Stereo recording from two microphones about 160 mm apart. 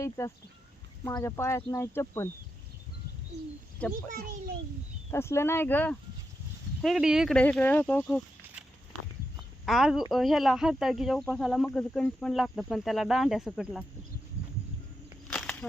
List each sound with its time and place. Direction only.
0.2 s speech: 15° left (ahead or behind)
4.1 s a child's voice: 60° right (ahead or behind)
5.1 s speech: 15° left (ahead or behind)
6.8 s speech: 5° right (ahead or behind)
9.6 s speech: centre (ahead or behind)
15.3 s a sound: 5° left (ahead or behind)